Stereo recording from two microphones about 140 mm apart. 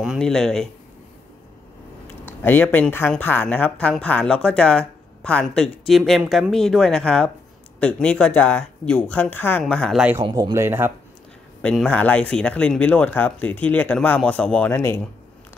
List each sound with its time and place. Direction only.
0.0 s speech: centre (ahead or behind)
2.0 s speech: 15° left (ahead or behind)
10.2 s speech: 30° right (ahead or behind)
11.6 s speech: 5° left (ahead or behind)